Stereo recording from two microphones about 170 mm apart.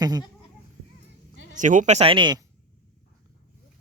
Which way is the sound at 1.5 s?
50° right (ahead or behind).